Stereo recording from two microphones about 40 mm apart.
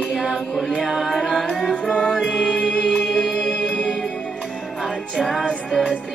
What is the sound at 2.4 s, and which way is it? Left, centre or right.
Music, left.